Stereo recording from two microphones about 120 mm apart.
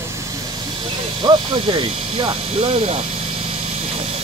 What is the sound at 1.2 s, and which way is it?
Speech, 45° right (ahead or behind).